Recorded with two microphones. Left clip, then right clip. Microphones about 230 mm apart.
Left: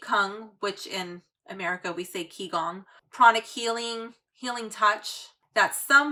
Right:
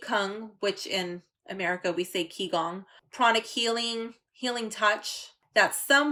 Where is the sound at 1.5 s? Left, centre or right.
Left.